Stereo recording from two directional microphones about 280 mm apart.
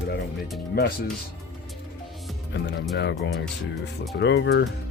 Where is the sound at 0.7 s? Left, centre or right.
Left.